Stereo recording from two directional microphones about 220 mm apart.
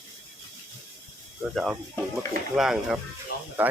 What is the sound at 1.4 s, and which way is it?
Speech, centre (ahead or behind).